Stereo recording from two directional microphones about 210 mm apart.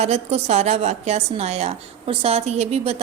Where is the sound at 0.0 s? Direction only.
30° right (ahead or behind).